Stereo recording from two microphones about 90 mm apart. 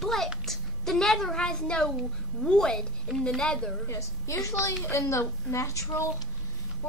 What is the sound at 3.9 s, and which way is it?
A woman's voice, 35° left (ahead or behind).